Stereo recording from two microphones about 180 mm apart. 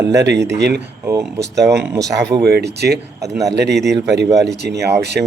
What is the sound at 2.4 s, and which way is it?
Speech, 65° right (ahead or behind).